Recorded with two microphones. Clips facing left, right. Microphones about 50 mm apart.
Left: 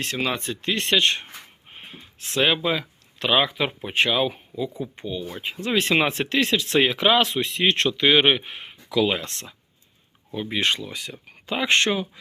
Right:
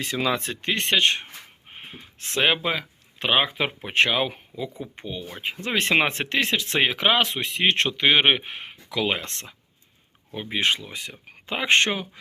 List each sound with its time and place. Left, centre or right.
0.6 s speech: right
1.7 s a sound: right
2.0 s speech: right
3.8 s speech: right
4.8 s speech: right
10.3 s speech: centre
10.9 s speech: right